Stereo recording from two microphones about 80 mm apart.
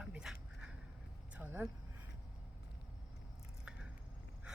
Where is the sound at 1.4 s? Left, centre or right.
Right.